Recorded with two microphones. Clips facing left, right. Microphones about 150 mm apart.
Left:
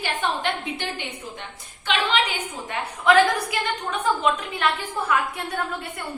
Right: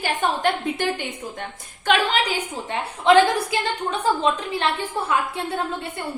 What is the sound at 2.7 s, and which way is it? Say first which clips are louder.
A woman's voice: right 3 dB; 25° right (ahead or behind).